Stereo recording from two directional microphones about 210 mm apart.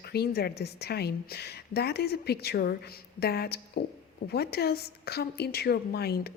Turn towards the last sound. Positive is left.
turn(degrees=50)  # may be behind; listen again after turning